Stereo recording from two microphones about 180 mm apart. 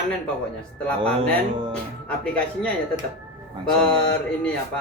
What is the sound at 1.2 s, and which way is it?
Speech, 30° right (ahead or behind).